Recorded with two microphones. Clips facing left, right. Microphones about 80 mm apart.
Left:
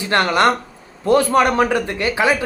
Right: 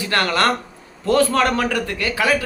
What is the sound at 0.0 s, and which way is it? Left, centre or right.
Speech, left.